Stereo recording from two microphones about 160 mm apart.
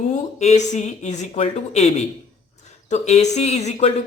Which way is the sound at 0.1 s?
45° left (ahead or behind).